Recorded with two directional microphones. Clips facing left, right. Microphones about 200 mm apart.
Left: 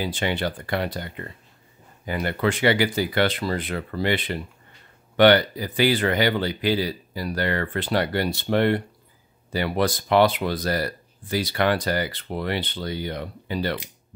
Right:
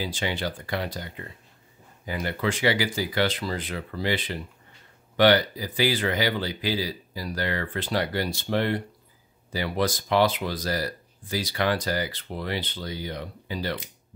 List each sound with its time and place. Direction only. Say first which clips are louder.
0.0 s speech: left 4 dB; 60° left (ahead or behind)